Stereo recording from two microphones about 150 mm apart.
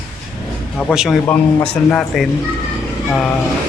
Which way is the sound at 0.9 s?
Centre (ahead or behind).